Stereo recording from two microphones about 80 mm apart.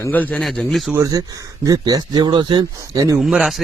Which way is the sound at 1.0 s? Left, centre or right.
Right.